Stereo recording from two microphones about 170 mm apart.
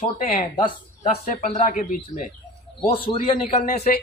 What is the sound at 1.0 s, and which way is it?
Speech, 40° left (ahead or behind).